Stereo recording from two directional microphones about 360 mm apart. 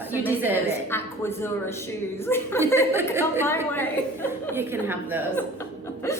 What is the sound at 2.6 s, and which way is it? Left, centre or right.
Speech, centre.